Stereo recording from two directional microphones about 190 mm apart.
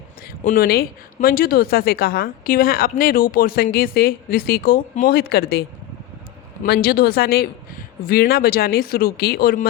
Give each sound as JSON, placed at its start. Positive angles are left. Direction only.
{"t": 0.2, "sound": "speech", "side_deg": 50}
{"t": 6.7, "sound": "speech", "side_deg": 55}